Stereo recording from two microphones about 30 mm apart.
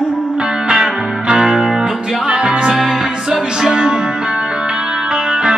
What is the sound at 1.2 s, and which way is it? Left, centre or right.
Music, right.